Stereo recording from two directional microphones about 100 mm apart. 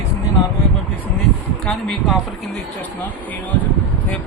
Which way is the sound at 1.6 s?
Centre (ahead or behind).